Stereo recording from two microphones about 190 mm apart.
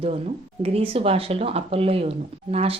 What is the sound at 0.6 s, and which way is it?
Speech, 30° right (ahead or behind).